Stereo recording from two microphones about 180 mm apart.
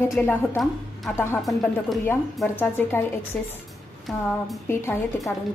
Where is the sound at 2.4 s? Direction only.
10° left (ahead or behind).